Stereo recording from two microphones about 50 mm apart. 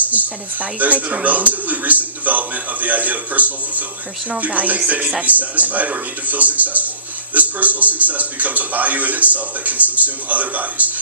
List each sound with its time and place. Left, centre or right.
0.1 s speech: right